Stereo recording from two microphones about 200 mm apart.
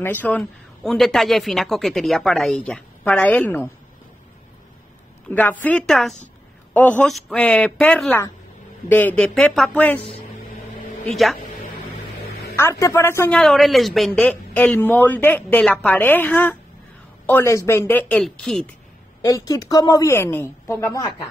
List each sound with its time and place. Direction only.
0.0 s a woman's voice: 10° left (ahead or behind)
5.3 s a man's voice: 10° left (ahead or behind)
12.5 s a man's voice: 15° left (ahead or behind)
19.2 s a man's voice: 15° left (ahead or behind)